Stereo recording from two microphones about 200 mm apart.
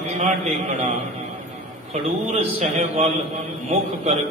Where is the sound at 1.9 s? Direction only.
35° right (ahead or behind).